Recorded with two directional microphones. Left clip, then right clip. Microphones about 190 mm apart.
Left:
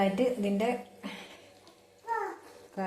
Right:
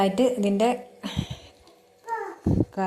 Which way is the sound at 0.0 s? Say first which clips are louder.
Right 6 dB; 50° right (ahead or behind).